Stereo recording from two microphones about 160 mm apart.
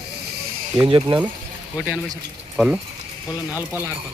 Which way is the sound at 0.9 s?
25° right (ahead or behind).